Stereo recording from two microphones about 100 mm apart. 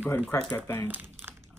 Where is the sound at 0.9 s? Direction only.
20° right (ahead or behind).